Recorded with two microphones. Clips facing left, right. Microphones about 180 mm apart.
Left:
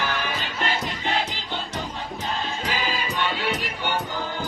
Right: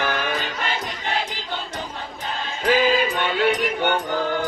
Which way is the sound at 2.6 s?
55° right (ahead or behind).